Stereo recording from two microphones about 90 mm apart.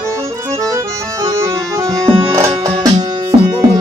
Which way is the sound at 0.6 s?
35° right (ahead or behind).